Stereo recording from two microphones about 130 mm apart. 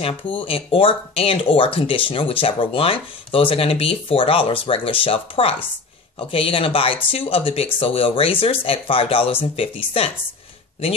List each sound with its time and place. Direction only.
0.0 s speech: 45° left (ahead or behind)